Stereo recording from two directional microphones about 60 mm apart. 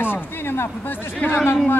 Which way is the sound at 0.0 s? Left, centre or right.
Left.